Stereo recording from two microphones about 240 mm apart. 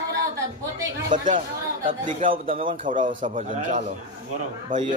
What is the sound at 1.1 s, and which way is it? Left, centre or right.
A man's voice, right.